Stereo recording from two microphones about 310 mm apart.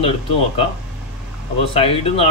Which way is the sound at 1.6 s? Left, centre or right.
Centre.